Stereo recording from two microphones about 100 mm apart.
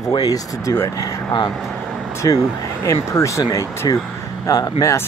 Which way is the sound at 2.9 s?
30° left (ahead or behind).